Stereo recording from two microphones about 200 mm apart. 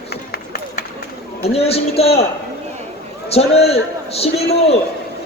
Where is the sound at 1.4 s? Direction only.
30° left (ahead or behind).